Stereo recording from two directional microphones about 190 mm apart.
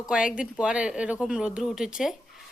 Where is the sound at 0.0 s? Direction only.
5° right (ahead or behind).